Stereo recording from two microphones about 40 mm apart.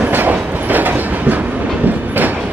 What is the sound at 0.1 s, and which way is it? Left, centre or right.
Train, right.